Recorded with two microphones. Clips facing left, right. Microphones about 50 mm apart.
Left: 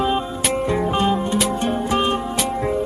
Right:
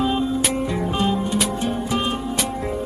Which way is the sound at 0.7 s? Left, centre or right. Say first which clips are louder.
Left 6 dB; centre.